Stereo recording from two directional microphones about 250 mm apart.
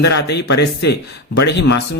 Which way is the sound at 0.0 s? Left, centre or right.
Left.